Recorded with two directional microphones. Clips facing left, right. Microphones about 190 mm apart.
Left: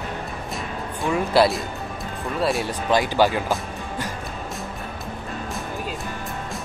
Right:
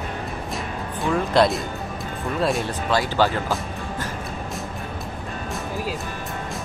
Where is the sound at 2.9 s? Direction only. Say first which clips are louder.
Left 2 dB; 15° left (ahead or behind).